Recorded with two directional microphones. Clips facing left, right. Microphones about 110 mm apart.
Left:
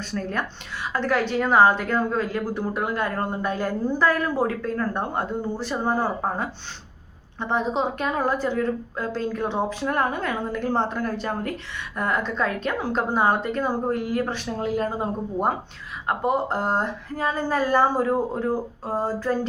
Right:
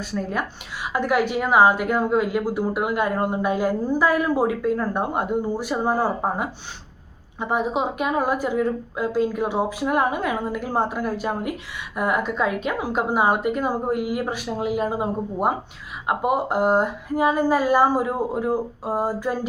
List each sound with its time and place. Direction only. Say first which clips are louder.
0.0 s a woman's voice: right 2 dB; 10° right (ahead or behind)